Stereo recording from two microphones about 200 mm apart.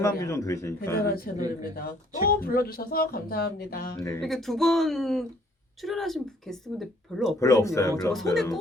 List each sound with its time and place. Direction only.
0.0 s a man's voice: 15° left (ahead or behind)
0.9 s speech: 50° left (ahead or behind)
3.9 s a man's voice: 15° left (ahead or behind)
4.2 s speech: centre (ahead or behind)
7.3 s a man's voice: 15° left (ahead or behind)
8.1 s speech: centre (ahead or behind)